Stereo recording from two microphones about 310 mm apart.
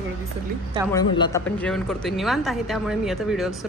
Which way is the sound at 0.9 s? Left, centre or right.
Centre.